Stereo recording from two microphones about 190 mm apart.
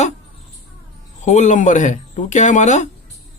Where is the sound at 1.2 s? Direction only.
40° left (ahead or behind).